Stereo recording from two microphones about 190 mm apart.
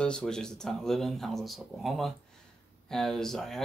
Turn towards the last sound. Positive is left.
turn(degrees=0)  # may be behind; listen again after turning